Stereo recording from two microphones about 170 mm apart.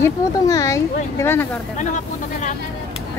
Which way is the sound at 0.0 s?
20° left (ahead or behind).